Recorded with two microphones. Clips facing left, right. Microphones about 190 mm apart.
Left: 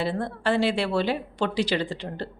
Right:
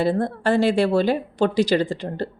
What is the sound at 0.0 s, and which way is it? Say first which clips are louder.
A woman's voice: right 6 dB; 45° right (ahead or behind).